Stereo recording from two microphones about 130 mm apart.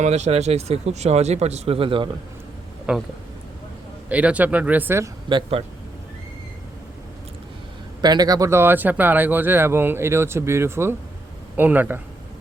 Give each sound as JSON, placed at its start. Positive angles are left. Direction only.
{"t": 0.0, "sound": "speech", "side_deg": -60}
{"t": 2.9, "sound": "speech", "side_deg": -5}
{"t": 4.1, "sound": "speech", "side_deg": -10}
{"t": 5.3, "sound": "speech", "side_deg": -45}
{"t": 8.0, "sound": "speech", "side_deg": -30}